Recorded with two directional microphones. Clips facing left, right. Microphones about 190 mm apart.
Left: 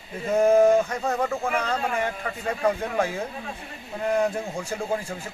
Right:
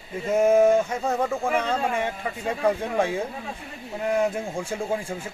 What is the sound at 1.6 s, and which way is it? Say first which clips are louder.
Speech: right 1 dB; 25° right (ahead or behind).